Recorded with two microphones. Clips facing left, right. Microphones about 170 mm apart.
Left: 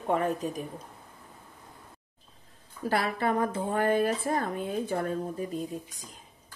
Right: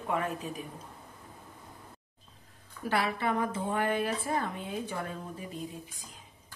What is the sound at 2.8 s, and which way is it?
A woman's voice, 40° left (ahead or behind).